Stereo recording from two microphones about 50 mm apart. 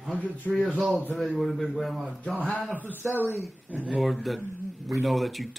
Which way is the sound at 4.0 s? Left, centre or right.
Centre.